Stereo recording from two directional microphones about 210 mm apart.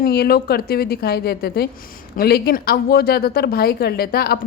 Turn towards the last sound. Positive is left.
turn(degrees=50)  # may be behind; listen again after turning